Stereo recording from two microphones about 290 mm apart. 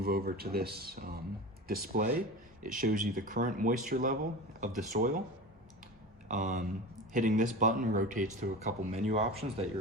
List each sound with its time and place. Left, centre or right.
0.0 s speech: right
6.2 s speech: right